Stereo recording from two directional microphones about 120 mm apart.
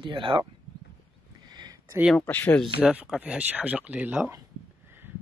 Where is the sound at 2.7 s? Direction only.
15° right (ahead or behind).